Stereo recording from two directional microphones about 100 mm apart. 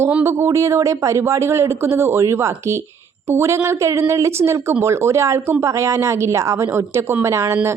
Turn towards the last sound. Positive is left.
turn(degrees=-25)  # may be behind; listen again after turning